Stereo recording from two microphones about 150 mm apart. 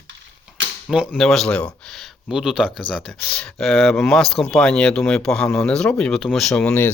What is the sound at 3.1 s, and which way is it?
Speech, 10° left (ahead or behind).